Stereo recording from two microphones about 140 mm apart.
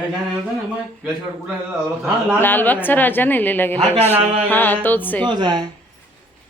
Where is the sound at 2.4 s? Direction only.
15° left (ahead or behind).